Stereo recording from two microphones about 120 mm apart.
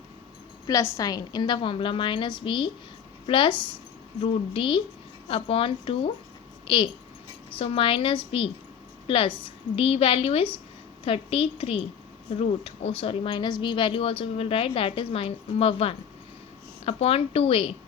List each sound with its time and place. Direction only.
0.7 s a woman's voice: 25° left (ahead or behind); by 17.7 s 50° left (ahead or behind)